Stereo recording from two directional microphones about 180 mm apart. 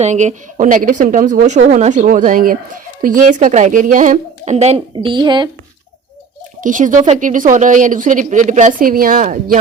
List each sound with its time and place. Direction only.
0.0 s a woman's voice: 40° right (ahead or behind)
4.9 s a woman's voice: 25° right (ahead or behind)
6.6 s a woman's voice: 45° right (ahead or behind)